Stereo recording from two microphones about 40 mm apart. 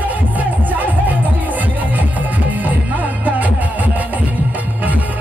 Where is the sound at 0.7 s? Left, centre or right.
Right.